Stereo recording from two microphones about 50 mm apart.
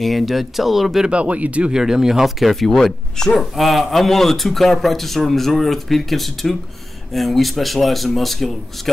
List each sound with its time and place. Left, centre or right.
0.0 s a man's voice: centre
1.0 s speech: right
1.7 s a man's voice: centre